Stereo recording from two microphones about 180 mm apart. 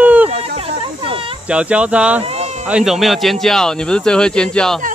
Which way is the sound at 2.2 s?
35° right (ahead or behind).